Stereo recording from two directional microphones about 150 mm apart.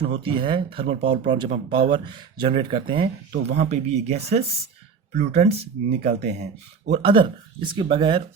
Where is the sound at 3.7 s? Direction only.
45° right (ahead or behind).